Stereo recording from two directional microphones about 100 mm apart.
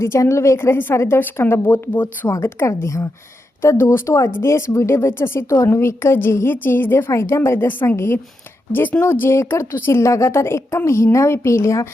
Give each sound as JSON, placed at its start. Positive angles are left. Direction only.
{"t": 0.0, "sound": "a woman's voice", "side_deg": 30}